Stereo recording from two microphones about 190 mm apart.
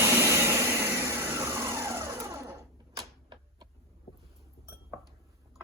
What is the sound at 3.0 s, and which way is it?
Typewriter, 25° right (ahead or behind).